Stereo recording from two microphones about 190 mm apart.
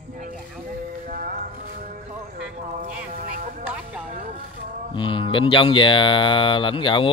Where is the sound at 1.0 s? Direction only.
45° right (ahead or behind).